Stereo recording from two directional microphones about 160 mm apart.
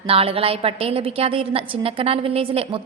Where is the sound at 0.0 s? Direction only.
35° right (ahead or behind).